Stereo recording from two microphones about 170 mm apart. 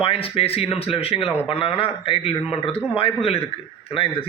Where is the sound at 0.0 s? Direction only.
35° left (ahead or behind).